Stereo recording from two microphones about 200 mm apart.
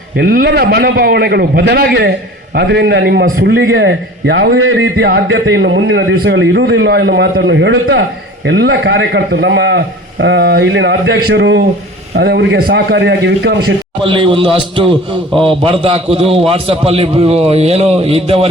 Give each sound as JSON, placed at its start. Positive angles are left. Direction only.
{"t": 0.2, "sound": "a man's voice", "side_deg": -50}
{"t": 14.0, "sound": "speech", "side_deg": -25}